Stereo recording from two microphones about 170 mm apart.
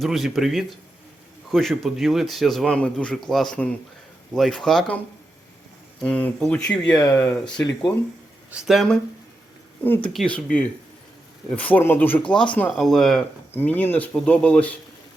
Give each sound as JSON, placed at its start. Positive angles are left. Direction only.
{"t": 0.0, "sound": "speech", "side_deg": 0}
{"t": 6.0, "sound": "speech", "side_deg": 5}
{"t": 6.9, "sound": "speech", "side_deg": 20}
{"t": 8.4, "sound": "speech", "side_deg": 0}
{"t": 9.8, "sound": "speech", "side_deg": 10}